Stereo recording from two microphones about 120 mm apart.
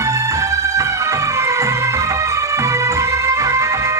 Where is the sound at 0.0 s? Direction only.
25° right (ahead or behind).